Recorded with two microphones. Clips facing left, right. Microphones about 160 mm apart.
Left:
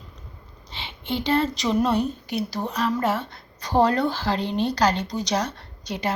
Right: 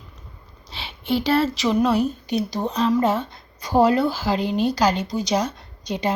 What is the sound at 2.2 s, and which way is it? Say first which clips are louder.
A woman's voice: right 4 dB; 20° right (ahead or behind).